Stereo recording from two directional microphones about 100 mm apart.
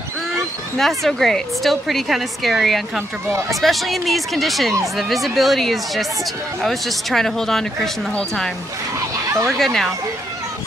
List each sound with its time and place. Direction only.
0.7 s a woman's voice: 5° left (ahead or behind)
9.5 s a woman's voice: centre (ahead or behind)